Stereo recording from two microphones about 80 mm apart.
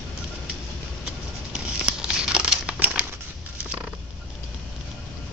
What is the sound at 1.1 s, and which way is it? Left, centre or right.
Crumpling, centre.